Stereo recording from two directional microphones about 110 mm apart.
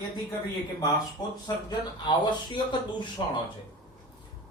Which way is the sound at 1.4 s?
35° left (ahead or behind).